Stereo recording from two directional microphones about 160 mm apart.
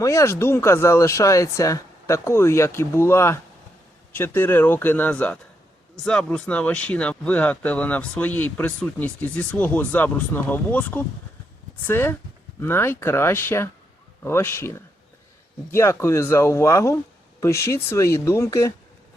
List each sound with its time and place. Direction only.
0.0 s speech: 20° left (ahead or behind)